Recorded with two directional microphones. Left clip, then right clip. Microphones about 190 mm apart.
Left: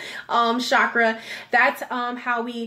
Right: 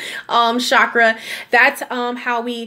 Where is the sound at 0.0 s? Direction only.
40° right (ahead or behind).